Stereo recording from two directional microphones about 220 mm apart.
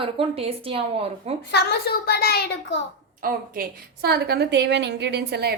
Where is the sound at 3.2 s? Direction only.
45° right (ahead or behind).